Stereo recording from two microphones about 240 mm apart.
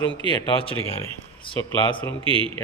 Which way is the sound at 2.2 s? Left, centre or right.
Right.